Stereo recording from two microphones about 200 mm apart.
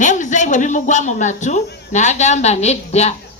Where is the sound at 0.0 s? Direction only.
40° left (ahead or behind).